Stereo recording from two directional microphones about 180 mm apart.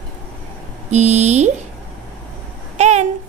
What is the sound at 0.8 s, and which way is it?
Speech, 40° right (ahead or behind).